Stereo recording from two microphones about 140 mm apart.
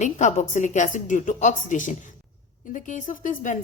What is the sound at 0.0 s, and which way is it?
A woman's voice, 60° left (ahead or behind).